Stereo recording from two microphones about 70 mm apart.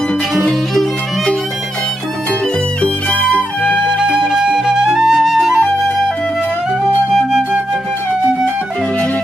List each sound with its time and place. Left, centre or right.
0.5 s music: centre
2.8 s music: left
3.7 s flute: centre
7.1 s flute: centre